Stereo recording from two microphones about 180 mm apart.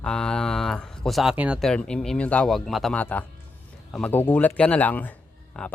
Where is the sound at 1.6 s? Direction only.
5° left (ahead or behind).